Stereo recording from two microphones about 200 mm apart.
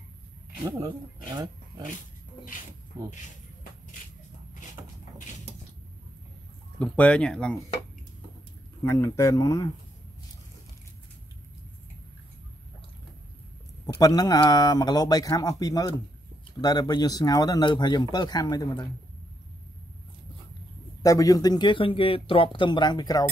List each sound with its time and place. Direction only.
0.7 s speech: 20° right (ahead or behind)
4.8 s a sound: 15° right (ahead or behind)
6.8 s speech: 5° left (ahead or behind)
8.8 s speech: 15° left (ahead or behind)
13.9 s speech: 20° left (ahead or behind)
21.0 s speech: 15° left (ahead or behind)